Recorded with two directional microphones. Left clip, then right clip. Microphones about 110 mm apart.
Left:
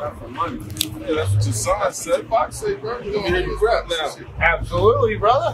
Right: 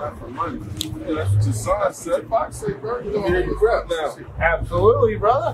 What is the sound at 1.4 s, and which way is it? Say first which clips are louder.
A man's voice: even; 15° left (ahead or behind).